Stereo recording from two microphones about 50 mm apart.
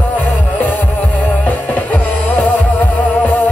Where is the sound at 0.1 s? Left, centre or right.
Left.